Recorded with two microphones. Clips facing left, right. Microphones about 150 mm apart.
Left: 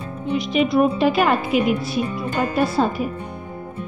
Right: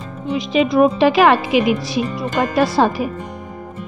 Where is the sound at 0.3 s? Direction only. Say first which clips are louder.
Right 2 dB; 90° right.